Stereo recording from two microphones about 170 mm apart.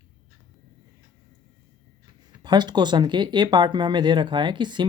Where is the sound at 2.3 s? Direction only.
25° right (ahead or behind).